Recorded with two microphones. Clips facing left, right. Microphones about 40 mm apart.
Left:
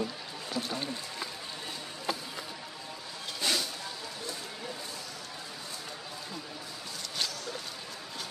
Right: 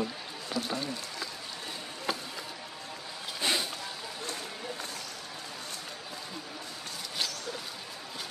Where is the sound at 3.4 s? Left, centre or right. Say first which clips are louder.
Right 1 dB; right.